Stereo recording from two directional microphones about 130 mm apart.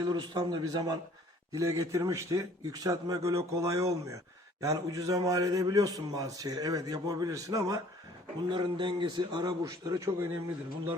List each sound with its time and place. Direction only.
0.0 s a man's voice: 30° right (ahead or behind)
8.4 s a man's voice: 35° right (ahead or behind)